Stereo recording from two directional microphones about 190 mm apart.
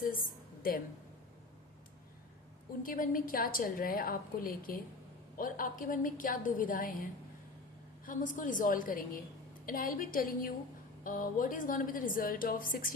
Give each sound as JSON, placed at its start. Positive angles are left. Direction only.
{"t": 0.1, "sound": "a woman's voice", "side_deg": 50}
{"t": 2.8, "sound": "a woman's voice", "side_deg": 45}